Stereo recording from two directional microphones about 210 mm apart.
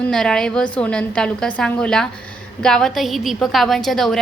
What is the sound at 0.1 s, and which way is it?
A woman's voice, centre (ahead or behind).